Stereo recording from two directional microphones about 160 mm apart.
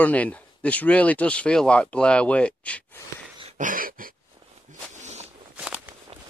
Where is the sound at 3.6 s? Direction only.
60° right (ahead or behind).